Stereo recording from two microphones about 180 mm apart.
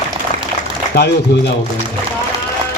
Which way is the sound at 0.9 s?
65° left (ahead or behind).